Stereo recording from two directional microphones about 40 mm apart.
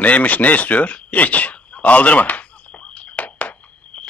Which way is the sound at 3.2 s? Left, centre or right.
Left.